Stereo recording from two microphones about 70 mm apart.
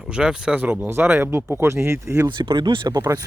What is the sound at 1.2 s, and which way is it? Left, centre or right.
Speech, right.